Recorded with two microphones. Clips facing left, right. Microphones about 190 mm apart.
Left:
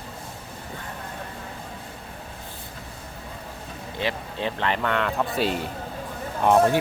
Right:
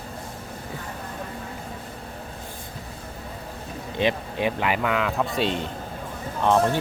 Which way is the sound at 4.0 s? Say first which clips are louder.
Right 5 dB; 15° right (ahead or behind).